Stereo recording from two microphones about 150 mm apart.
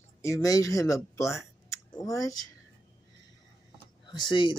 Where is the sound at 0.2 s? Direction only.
20° left (ahead or behind).